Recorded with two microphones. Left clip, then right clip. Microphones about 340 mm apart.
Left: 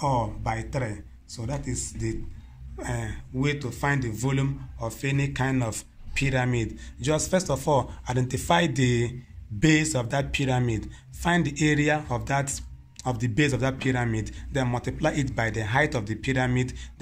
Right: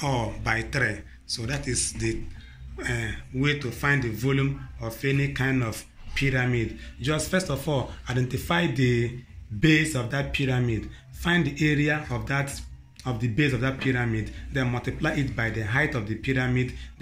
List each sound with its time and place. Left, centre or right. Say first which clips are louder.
0.0 s a man's voice: left 2 dB; left